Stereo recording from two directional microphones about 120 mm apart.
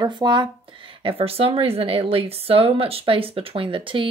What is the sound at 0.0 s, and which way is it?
Speech, 40° right (ahead or behind).